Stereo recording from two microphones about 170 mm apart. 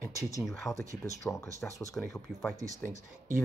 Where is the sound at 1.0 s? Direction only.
15° left (ahead or behind).